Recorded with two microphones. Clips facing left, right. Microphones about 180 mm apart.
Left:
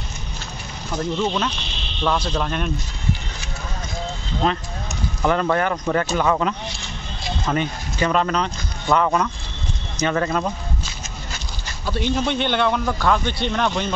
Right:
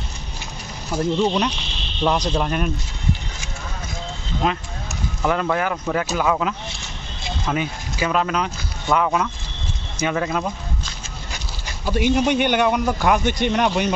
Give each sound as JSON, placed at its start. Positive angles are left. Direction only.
{"t": 1.1, "sound": "speech", "side_deg": -15}
{"t": 4.4, "sound": "speech", "side_deg": -5}